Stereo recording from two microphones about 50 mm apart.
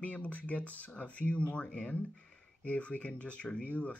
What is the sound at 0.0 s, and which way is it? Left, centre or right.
Speech, left.